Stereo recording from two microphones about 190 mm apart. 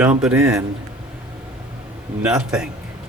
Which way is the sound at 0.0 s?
5° right (ahead or behind).